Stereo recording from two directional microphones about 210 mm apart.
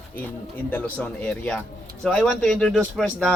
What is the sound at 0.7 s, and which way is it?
Speech, 5° left (ahead or behind).